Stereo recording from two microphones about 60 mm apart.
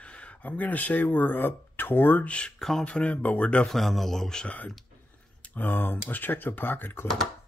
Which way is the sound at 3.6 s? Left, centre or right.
Centre.